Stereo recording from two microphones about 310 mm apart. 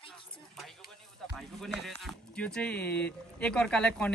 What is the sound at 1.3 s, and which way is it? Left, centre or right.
Speech, centre.